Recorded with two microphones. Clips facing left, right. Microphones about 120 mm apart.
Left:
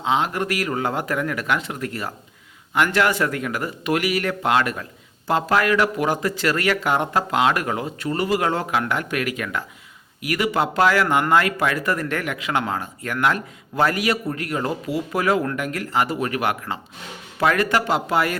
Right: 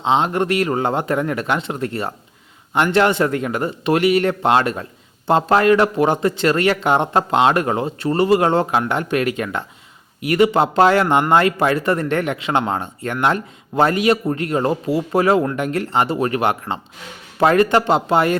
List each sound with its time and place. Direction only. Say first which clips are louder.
0.0 s speech: right 4 dB; 25° right (ahead or behind)